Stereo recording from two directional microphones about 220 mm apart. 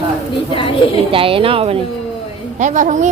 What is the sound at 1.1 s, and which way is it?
A woman's voice, 25° right (ahead or behind).